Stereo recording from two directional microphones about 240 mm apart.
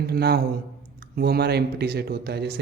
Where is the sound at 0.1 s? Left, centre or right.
Right.